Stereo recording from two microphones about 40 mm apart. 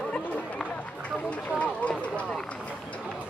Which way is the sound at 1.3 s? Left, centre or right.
Left.